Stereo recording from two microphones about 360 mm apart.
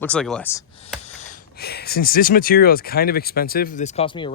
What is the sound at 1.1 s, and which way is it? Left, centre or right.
Speech, centre.